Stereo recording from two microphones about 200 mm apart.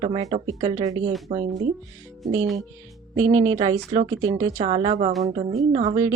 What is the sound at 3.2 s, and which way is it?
Speech, 90° right.